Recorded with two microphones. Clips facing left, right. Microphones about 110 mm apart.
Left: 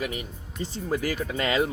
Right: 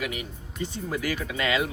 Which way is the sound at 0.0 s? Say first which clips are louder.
Left 1 dB; 35° left (ahead or behind).